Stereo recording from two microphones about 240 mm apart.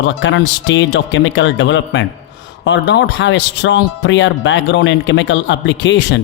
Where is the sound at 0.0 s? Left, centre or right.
Left.